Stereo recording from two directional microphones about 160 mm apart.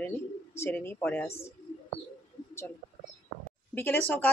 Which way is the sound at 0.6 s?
15° left (ahead or behind).